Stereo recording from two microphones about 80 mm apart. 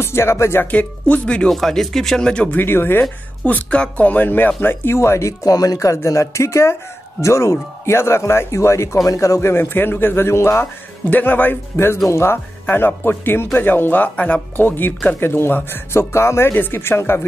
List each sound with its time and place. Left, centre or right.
0.0 s speech: left
0.7 s speech: centre
2.5 s speech: left